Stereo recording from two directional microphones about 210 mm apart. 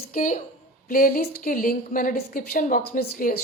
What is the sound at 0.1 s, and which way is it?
A woman's voice, 40° left (ahead or behind).